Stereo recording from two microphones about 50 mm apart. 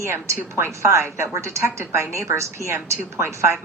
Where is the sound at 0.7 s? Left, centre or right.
Right.